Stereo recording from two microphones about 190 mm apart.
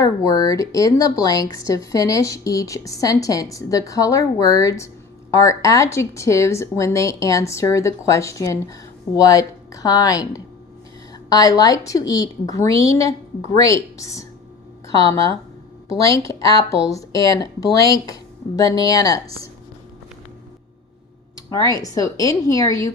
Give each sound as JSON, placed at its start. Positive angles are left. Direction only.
{"t": 0.0, "sound": "speech", "side_deg": 20}
{"t": 15.9, "sound": "speech", "side_deg": 15}
{"t": 21.5, "sound": "speech", "side_deg": 20}